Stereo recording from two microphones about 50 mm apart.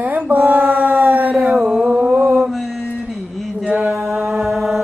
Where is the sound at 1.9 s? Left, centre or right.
Right.